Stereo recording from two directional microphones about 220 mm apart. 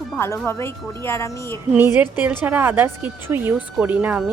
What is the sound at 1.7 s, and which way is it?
A woman's voice, 10° right (ahead or behind).